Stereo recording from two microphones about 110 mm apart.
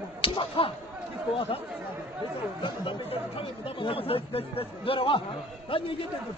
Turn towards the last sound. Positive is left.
turn(degrees=50)  # may be behind; listen again after turning